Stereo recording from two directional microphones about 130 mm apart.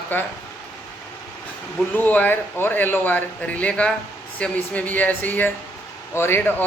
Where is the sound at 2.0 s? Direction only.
15° left (ahead or behind).